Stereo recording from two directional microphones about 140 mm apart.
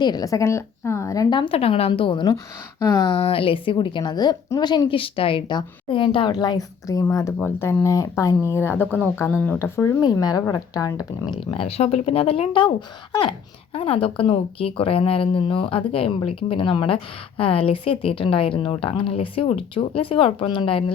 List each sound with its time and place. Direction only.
0.0 s a woman's voice: 30° left (ahead or behind)
2.8 s speech: 25° left (ahead or behind)
3.1 s a woman's voice: 40° left (ahead or behind); by 11.3 s 25° left (ahead or behind)
11.5 s speech: 45° left (ahead or behind)
13.7 s a woman's voice: 40° left (ahead or behind)